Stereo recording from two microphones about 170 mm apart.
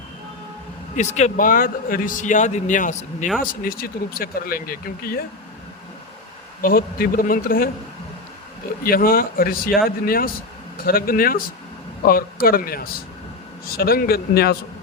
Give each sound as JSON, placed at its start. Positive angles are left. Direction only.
{"t": 0.9, "sound": "a man's voice", "side_deg": 40}
{"t": 3.2, "sound": "speech", "side_deg": -5}
{"t": 3.6, "sound": "speech", "side_deg": 60}
{"t": 6.6, "sound": "speech", "side_deg": 60}
{"t": 8.8, "sound": "speech", "side_deg": 60}